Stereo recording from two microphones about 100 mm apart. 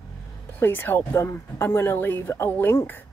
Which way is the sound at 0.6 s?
20° left (ahead or behind).